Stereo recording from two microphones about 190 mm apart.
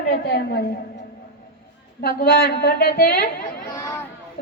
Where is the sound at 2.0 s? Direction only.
50° left (ahead or behind).